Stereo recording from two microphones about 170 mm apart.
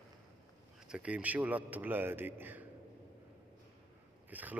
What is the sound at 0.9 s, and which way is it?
A man's voice, 10° right (ahead or behind).